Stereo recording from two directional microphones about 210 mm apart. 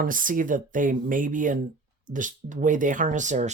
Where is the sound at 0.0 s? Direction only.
40° right (ahead or behind).